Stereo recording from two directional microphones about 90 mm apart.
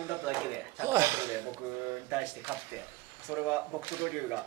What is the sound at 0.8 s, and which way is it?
Speech, 30° right (ahead or behind).